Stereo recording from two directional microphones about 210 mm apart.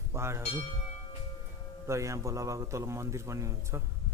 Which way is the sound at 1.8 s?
15° right (ahead or behind).